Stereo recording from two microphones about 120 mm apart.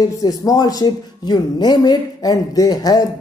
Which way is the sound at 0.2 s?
30° left (ahead or behind).